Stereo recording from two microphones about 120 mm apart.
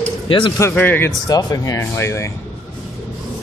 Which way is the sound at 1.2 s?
30° left (ahead or behind).